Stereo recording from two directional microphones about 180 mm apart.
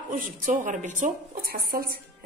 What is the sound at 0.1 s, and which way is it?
A woman's voice, 45° right (ahead or behind).